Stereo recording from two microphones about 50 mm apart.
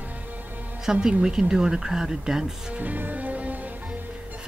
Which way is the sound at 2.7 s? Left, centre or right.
Right.